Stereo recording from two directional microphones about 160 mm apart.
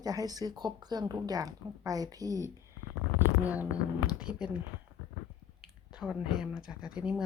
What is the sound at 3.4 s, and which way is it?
Speech, 10° right (ahead or behind).